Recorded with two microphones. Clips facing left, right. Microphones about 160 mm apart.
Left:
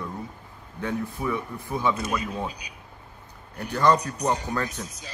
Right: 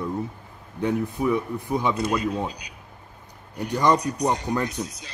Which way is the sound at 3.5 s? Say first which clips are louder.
Right 1 dB; 15° right (ahead or behind).